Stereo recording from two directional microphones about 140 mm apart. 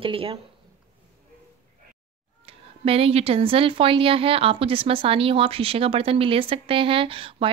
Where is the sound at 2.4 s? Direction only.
45° right (ahead or behind).